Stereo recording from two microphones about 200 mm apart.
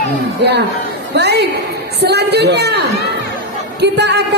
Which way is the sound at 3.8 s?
60° right (ahead or behind).